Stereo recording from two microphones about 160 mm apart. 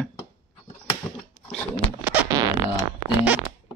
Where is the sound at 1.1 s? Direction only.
15° left (ahead or behind).